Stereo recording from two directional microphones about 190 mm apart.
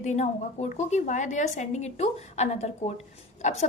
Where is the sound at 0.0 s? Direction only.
40° left (ahead or behind).